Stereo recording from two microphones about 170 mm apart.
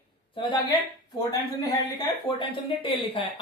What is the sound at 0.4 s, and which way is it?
Speech, 30° left (ahead or behind).